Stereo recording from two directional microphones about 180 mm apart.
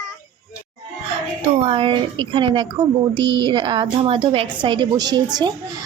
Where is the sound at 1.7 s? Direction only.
30° right (ahead or behind).